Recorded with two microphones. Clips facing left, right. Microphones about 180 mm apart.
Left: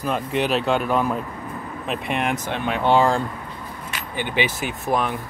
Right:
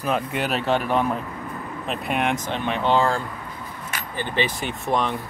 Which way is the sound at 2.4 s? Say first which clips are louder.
Left 2 dB; 10° left (ahead or behind).